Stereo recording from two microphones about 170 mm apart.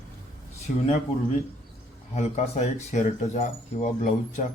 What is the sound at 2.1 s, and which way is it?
Speech, 45° left (ahead or behind).